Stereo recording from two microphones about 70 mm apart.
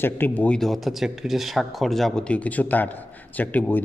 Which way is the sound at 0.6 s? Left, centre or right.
Centre.